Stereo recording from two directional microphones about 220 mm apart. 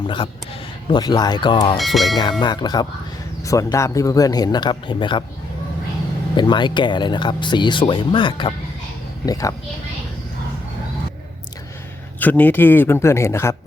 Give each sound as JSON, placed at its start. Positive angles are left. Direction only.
{"t": 0.9, "sound": "speech", "side_deg": 20}
{"t": 1.8, "sound": "speech", "side_deg": 0}
{"t": 2.4, "sound": "speech", "side_deg": 20}
{"t": 6.3, "sound": "speech", "side_deg": 20}
{"t": 12.2, "sound": "speech", "side_deg": 10}